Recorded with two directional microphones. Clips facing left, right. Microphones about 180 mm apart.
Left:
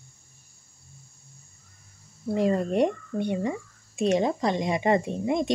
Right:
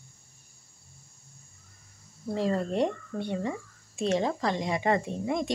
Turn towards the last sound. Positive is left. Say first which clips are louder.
# left 4 dB
turn(degrees=20)  # may be behind; listen again after turning